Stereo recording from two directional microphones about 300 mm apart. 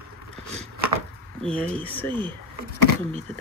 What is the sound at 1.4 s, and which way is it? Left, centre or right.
Speech, centre.